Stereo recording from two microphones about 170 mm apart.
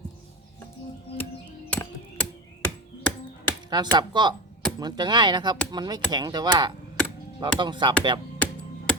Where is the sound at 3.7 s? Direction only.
25° right (ahead or behind).